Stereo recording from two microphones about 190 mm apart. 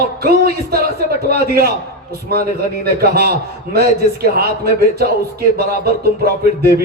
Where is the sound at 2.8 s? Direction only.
55° right (ahead or behind).